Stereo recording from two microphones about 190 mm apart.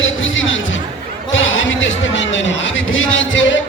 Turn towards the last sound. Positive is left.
turn(degrees=75)  # may be behind; listen again after turning